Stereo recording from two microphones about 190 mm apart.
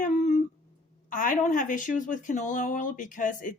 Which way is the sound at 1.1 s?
45° left (ahead or behind).